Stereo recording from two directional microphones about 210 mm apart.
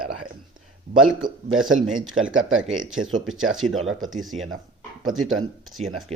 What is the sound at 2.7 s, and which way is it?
Speech, centre (ahead or behind).